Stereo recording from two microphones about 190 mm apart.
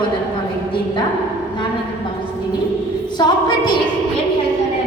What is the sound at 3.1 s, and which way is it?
Speech, 25° left (ahead or behind).